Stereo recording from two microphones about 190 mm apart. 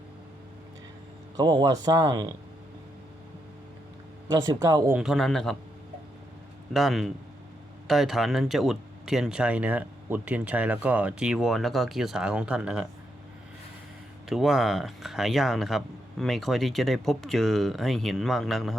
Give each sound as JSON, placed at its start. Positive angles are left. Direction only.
{"t": 1.4, "sound": "speech", "side_deg": -20}
{"t": 4.3, "sound": "speech", "side_deg": -15}
{"t": 4.9, "sound": "speech", "side_deg": 0}
{"t": 6.7, "sound": "speech", "side_deg": 0}
{"t": 14.3, "sound": "speech", "side_deg": 0}